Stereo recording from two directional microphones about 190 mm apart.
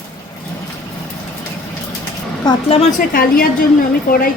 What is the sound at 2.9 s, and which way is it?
A woman's voice, 50° left (ahead or behind).